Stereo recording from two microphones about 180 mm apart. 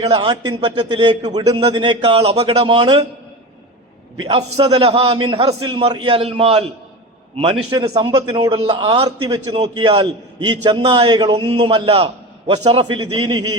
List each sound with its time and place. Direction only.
0.0 s a man's voice: 30° right (ahead or behind)
4.2 s a man's voice: 30° right (ahead or behind)
7.9 s a man's voice: 30° right (ahead or behind)